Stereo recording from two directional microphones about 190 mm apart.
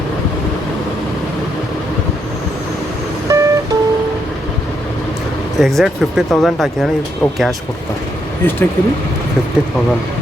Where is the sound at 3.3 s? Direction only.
15° right (ahead or behind).